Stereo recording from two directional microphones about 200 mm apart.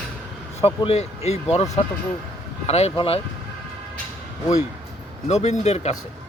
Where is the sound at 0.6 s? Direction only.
30° left (ahead or behind).